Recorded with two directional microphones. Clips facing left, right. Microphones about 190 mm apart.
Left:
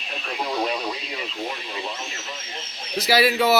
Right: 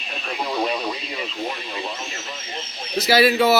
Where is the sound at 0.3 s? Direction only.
5° right (ahead or behind).